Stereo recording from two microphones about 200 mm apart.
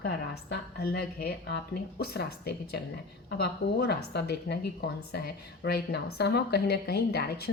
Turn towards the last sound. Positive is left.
turn(degrees=55)  # may be behind; listen again after turning